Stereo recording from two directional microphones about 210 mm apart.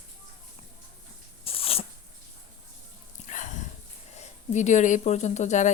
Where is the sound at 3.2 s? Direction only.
35° left (ahead or behind).